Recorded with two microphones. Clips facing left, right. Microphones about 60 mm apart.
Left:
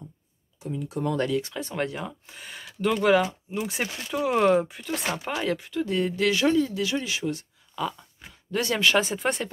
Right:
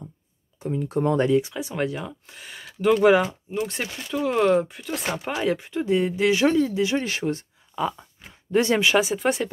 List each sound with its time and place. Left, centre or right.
0.6 s speech: right
1.1 s speech: right
1.5 s speech: centre
3.5 s speech: centre
5.6 s speech: right
7.0 s speech: right
7.7 s speech: right
8.9 s speech: centre